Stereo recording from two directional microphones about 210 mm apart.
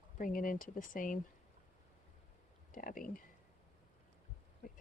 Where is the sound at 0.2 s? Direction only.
40° left (ahead or behind).